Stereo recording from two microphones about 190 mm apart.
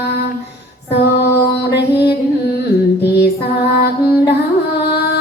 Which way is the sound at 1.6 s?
60° left (ahead or behind).